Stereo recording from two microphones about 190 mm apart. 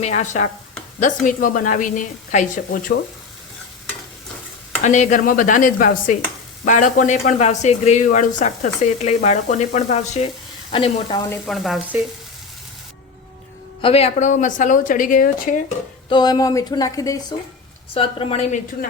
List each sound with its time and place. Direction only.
0.0 s a woman's voice: 35° left (ahead or behind)
4.8 s speech: 40° left (ahead or behind)
11.4 s speech: centre (ahead or behind)
13.8 s speech: 30° left (ahead or behind)
16.0 s speech: 20° left (ahead or behind)
17.9 s speech: 30° left (ahead or behind)